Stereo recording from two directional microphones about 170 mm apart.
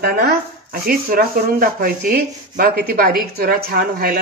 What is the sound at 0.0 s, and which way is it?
Speech, 65° right (ahead or behind).